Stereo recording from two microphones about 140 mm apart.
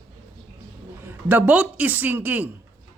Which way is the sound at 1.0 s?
15° right (ahead or behind).